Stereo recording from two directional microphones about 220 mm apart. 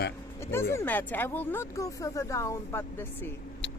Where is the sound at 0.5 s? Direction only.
10° left (ahead or behind).